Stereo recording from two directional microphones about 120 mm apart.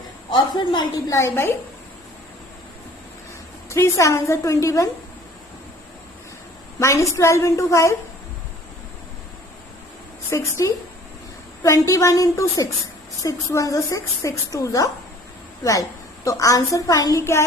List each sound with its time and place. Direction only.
0.3 s a woman's voice: 40° left (ahead or behind)
1.1 s a woman's voice: 20° left (ahead or behind)
3.7 s a woman's voice: 25° left (ahead or behind)
6.7 s a woman's voice: 25° left (ahead or behind)
10.2 s a woman's voice: 25° left (ahead or behind)